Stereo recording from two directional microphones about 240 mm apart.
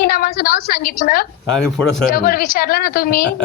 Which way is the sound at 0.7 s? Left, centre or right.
Left.